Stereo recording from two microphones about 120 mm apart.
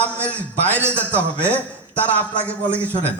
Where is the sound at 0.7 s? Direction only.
20° right (ahead or behind).